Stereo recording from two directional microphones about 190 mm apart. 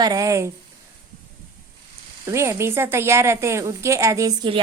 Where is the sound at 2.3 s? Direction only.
15° right (ahead or behind).